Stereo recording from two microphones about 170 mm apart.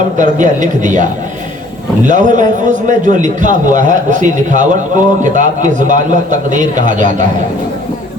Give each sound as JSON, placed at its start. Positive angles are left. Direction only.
{"t": 0.2, "sound": "a man's voice", "side_deg": -45}
{"t": 2.0, "sound": "a man's voice", "side_deg": -45}